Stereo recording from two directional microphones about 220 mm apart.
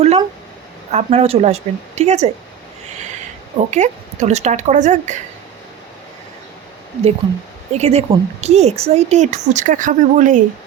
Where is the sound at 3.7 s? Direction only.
30° right (ahead or behind).